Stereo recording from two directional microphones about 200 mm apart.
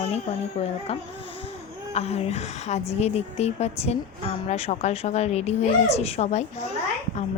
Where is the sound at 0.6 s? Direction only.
30° left (ahead or behind).